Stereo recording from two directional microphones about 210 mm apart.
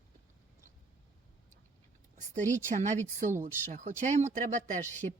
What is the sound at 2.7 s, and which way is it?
Speech, 35° right (ahead or behind).